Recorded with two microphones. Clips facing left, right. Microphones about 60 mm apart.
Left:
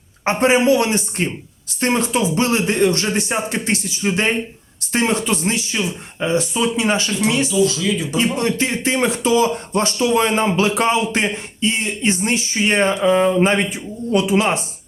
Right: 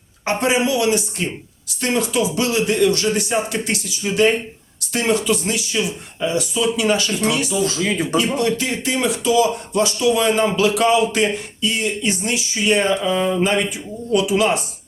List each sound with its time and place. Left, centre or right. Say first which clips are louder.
0.3 s speech: left 4 dB; left
7.5 s speech: left 2 dB; right
8.1 s speech: right 1 dB; left